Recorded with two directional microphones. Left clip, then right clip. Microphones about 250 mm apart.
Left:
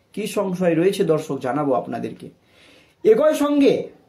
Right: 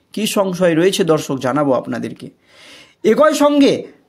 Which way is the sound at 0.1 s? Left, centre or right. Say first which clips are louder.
Right 6 dB; right.